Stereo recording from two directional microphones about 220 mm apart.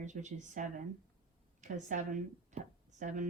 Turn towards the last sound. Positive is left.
turn(degrees=-35)  # may be behind; listen again after turning